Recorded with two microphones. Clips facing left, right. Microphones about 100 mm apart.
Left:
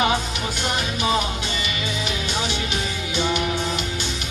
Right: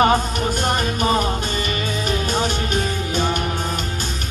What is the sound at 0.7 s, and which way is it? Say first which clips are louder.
Music: right 2 dB; 45° right (ahead or behind).